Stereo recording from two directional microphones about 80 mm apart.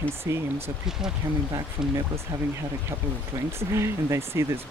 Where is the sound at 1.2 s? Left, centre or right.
Right.